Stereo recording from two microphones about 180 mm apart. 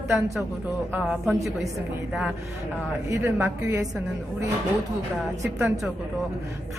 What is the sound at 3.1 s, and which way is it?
Speech, 15° right (ahead or behind).